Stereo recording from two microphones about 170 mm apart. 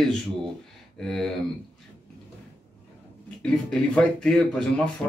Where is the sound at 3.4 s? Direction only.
5° left (ahead or behind).